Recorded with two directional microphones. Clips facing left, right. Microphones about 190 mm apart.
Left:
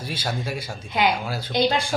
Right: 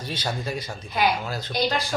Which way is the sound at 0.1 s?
10° left (ahead or behind).